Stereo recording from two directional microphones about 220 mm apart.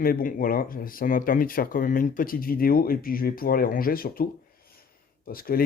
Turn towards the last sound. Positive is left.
turn(degrees=40)  # may be behind; listen again after turning